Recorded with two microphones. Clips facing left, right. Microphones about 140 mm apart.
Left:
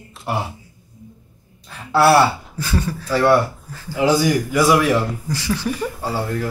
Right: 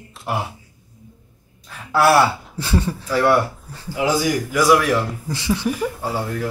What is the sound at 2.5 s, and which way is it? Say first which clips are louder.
Speech: right 1 dB; 25° right (ahead or behind).